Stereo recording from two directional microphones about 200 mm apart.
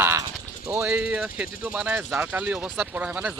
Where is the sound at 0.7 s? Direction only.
10° right (ahead or behind).